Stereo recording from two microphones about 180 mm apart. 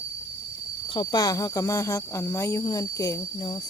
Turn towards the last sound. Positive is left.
turn(degrees=20)  # may be behind; listen again after turning